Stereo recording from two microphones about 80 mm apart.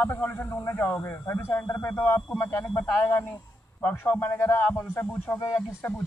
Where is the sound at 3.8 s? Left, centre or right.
Left.